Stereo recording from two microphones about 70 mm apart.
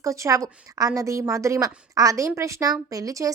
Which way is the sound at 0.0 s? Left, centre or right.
Right.